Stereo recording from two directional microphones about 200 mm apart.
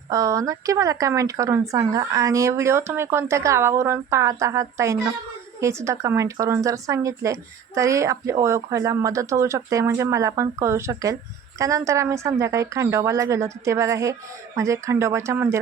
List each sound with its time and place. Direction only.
0.1 s speech: 15° right (ahead or behind)